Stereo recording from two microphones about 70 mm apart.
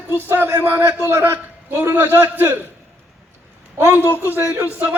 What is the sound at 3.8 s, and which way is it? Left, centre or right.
A man's voice, right.